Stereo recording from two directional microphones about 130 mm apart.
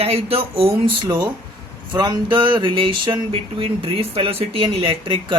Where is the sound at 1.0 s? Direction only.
35° right (ahead or behind).